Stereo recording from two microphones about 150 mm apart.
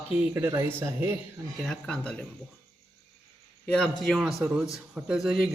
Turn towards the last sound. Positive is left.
turn(degrees=-5)  # may be behind; listen again after turning